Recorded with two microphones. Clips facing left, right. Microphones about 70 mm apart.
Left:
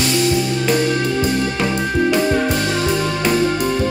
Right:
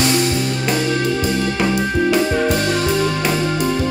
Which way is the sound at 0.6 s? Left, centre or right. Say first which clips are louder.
Even; centre.